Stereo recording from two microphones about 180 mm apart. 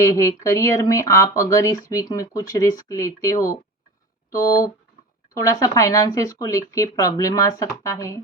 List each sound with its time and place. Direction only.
0.0 s speech: 15° left (ahead or behind)